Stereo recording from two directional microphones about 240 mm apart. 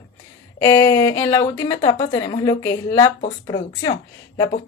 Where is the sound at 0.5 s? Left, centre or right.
Centre.